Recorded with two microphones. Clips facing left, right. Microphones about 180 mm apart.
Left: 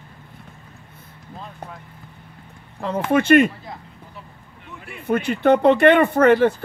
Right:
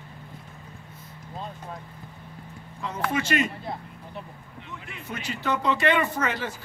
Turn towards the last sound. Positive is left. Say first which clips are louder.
# left 14 dB
turn(degrees=60)  # may be behind; listen again after turning